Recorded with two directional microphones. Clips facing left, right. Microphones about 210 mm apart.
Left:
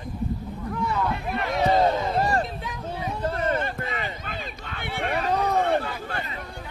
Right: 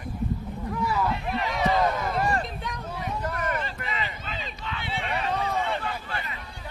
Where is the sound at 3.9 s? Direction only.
50° left (ahead or behind).